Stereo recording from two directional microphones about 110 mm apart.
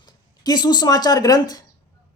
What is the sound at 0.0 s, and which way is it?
Speech, 40° left (ahead or behind).